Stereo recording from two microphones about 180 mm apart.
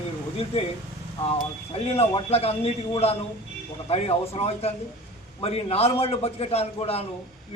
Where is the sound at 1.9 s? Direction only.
35° left (ahead or behind).